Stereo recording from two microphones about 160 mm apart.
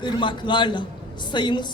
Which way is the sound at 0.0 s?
30° left (ahead or behind).